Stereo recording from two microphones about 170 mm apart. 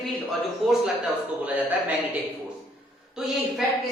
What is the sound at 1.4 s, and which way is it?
Speech, 10° right (ahead or behind).